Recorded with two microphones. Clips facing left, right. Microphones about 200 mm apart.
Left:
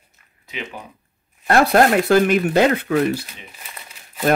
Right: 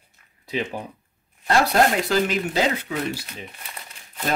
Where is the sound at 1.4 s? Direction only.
55° left (ahead or behind).